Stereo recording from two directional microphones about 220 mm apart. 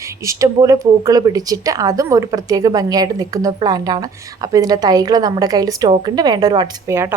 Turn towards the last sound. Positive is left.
turn(degrees=-10)  # may be behind; listen again after turning